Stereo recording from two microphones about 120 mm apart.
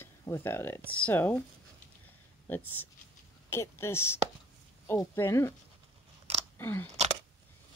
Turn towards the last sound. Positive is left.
turn(degrees=15)  # may be behind; listen again after turning